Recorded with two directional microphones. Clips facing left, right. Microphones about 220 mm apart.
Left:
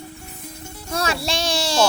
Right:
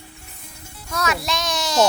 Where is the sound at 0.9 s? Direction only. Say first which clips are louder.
Left 1 dB; 30° left (ahead or behind).